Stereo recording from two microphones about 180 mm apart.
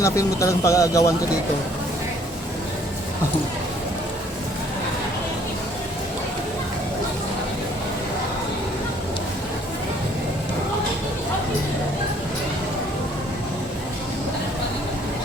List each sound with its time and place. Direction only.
0.0 s speech: 15° left (ahead or behind)